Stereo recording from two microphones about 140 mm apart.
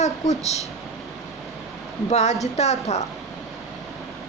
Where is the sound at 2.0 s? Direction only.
55° left (ahead or behind).